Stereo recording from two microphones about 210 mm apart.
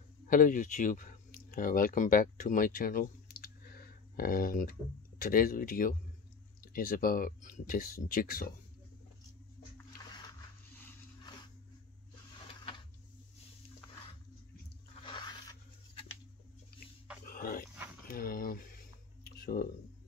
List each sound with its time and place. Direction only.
0.3 s speech: 40° left (ahead or behind)
12.4 s printer: 25° left (ahead or behind)
15.0 s zipper: 20° left (ahead or behind)
17.3 s dog: 45° left (ahead or behind)
18.0 s a sound: 45° left (ahead or behind)